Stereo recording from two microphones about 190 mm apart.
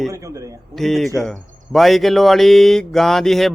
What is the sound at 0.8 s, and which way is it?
Speech, centre (ahead or behind).